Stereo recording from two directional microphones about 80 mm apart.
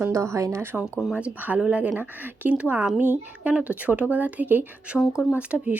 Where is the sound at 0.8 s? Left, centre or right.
Centre.